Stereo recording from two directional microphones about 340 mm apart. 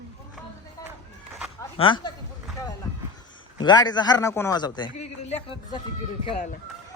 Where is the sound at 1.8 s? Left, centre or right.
Centre.